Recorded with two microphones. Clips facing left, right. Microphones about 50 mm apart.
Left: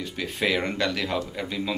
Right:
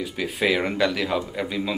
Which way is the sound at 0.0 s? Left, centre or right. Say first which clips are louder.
Right 3 dB; centre.